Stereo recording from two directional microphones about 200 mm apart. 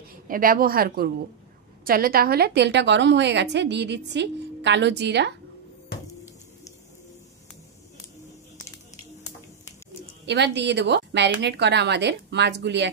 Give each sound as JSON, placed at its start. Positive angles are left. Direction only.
{"t": 0.3, "sound": "a woman's voice", "side_deg": -45}
{"t": 10.2, "sound": "a woman's voice", "side_deg": -60}